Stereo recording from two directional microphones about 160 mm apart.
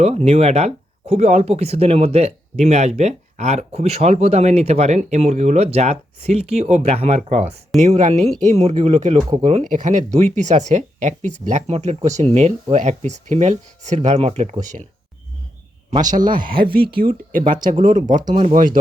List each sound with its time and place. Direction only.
0.0 s speech: 40° right (ahead or behind)
16.1 s speech: 60° right (ahead or behind)